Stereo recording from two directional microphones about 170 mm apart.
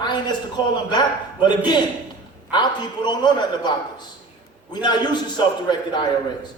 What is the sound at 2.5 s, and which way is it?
A man's voice, 25° left (ahead or behind).